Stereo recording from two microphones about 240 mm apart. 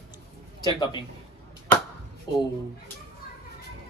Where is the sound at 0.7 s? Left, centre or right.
Centre.